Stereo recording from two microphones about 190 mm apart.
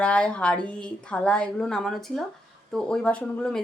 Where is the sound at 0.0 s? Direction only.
5° left (ahead or behind).